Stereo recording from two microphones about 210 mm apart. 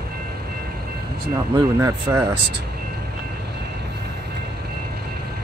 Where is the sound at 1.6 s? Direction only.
15° right (ahead or behind).